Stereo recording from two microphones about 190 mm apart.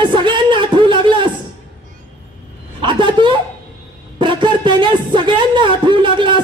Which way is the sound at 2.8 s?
25° right (ahead or behind).